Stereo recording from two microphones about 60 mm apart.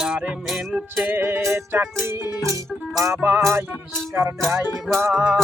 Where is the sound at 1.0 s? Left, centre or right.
Right.